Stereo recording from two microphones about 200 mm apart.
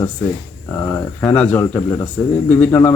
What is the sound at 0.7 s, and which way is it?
Speech, 15° left (ahead or behind).